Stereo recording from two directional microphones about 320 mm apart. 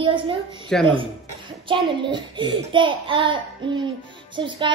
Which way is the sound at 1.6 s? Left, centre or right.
Centre.